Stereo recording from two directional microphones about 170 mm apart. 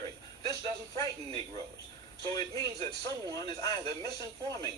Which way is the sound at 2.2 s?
20° left (ahead or behind).